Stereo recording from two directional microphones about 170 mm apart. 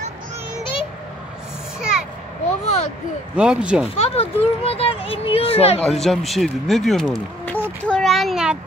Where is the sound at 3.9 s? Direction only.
35° left (ahead or behind).